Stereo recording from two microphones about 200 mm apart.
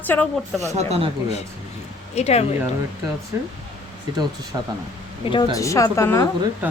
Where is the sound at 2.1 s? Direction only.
30° left (ahead or behind).